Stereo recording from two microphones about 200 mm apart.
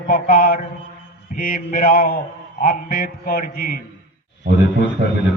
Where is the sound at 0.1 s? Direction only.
45° left (ahead or behind).